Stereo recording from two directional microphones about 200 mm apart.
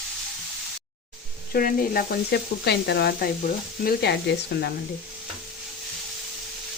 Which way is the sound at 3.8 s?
50° left (ahead or behind).